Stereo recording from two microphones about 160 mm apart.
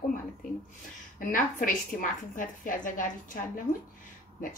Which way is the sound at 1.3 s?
55° left (ahead or behind).